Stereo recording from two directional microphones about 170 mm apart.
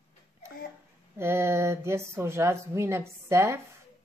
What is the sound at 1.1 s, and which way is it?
Speech, 15° right (ahead or behind).